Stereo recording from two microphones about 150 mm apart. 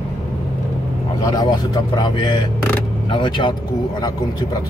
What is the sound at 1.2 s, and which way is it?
Speech, 25° left (ahead or behind).